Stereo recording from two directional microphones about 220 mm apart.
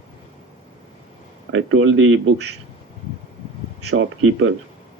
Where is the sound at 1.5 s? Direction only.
65° right (ahead or behind).